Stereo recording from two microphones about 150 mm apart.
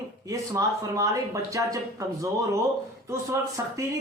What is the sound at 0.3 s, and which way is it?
Speech, 20° right (ahead or behind).